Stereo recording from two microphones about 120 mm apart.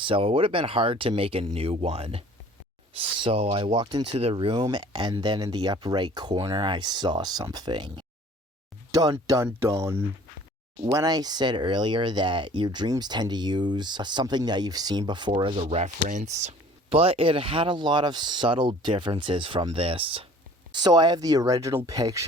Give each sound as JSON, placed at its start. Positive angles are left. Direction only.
{"t": 0.0, "sound": "speech", "side_deg": -50}
{"t": 15.6, "sound": "speech", "side_deg": -65}
{"t": 20.7, "sound": "speech", "side_deg": -35}